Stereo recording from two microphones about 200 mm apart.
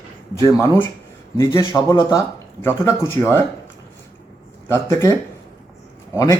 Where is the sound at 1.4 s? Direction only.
15° left (ahead or behind).